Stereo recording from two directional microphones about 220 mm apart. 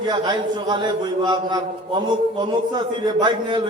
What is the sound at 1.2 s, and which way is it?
Speech, 20° right (ahead or behind).